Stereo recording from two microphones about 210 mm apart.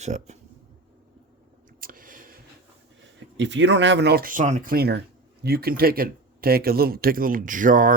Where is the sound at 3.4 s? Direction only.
60° right (ahead or behind).